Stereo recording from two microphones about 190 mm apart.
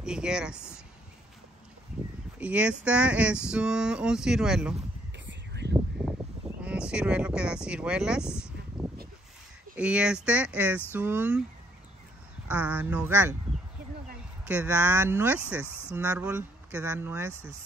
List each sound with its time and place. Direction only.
0.0 s speech: 5° right (ahead or behind)
2.3 s speech: 5° right (ahead or behind)
5.2 s a sound: 65° right (ahead or behind)
6.6 s speech: 5° right (ahead or behind)
8.3 s speech: 15° left (ahead or behind)
8.8 s a sound: 5° right (ahead or behind)
9.8 s speech: 5° right (ahead or behind)
12.4 s speech: 10° right (ahead or behind)
14.4 s speech: 10° right (ahead or behind)